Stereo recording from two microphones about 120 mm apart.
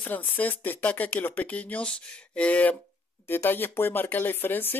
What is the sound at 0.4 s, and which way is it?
Speech, 15° left (ahead or behind).